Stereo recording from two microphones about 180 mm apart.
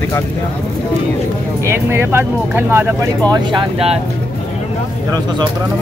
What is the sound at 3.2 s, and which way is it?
Speech, 30° right (ahead or behind).